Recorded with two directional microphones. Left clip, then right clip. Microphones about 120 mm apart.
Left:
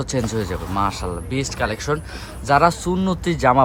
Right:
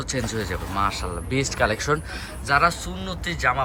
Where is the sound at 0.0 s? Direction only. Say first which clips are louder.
Left 4 dB; 40° left (ahead or behind).